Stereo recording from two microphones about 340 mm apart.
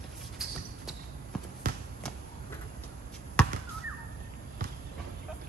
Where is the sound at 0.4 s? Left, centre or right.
Centre.